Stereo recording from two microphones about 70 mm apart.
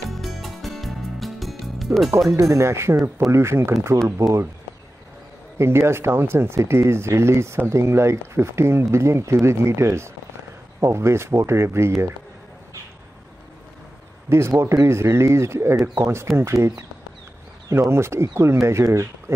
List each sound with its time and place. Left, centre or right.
0.1 s music: centre
2.0 s speech: right
5.6 s speech: right
14.3 s a man's voice: right